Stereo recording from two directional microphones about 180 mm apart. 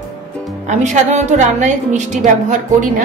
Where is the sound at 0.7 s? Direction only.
40° right (ahead or behind).